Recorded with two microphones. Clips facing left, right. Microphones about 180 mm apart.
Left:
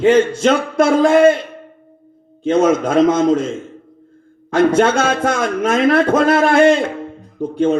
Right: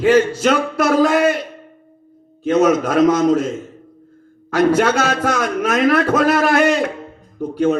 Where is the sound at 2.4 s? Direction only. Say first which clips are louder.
Left 1 dB; 25° left (ahead or behind).